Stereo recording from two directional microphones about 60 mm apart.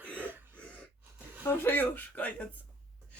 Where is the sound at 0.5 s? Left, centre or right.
Left.